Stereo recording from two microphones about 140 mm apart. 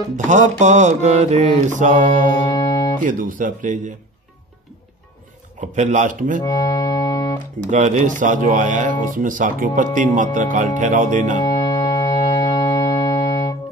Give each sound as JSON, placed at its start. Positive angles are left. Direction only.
{"t": 0.1, "sound": "mantra", "side_deg": -60}
{"t": 2.4, "sound": "music", "side_deg": 25}
{"t": 3.0, "sound": "speech", "side_deg": -75}
{"t": 5.6, "sound": "speech", "side_deg": -60}
{"t": 6.4, "sound": "music", "side_deg": 25}
{"t": 7.7, "sound": "mantra", "side_deg": -60}
{"t": 9.1, "sound": "speech", "side_deg": -70}
{"t": 11.4, "sound": "music", "side_deg": 30}